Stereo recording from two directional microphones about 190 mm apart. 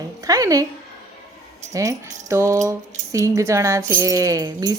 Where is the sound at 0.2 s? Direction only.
20° right (ahead or behind).